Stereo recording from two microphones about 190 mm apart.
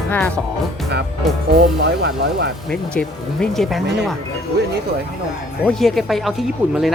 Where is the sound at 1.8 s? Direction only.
60° right (ahead or behind).